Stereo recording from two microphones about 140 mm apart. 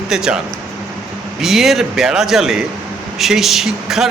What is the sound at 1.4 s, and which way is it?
A man's voice, centre (ahead or behind).